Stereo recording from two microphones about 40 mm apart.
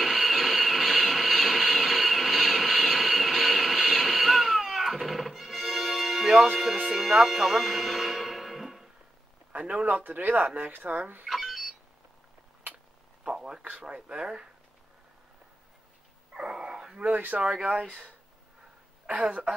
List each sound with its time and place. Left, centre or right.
0.0 s vehicle: centre
6.6 s speech: centre
7.2 s music: centre
9.5 s a sound: right
9.8 s speech: right
11.2 s telephone: centre
13.2 s a sound: centre
13.7 s speech: right
16.3 s dog: right
17.4 s speech: centre
19.0 s a woman's voice: right